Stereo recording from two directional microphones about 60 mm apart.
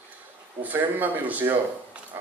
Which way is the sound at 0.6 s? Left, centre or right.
Right.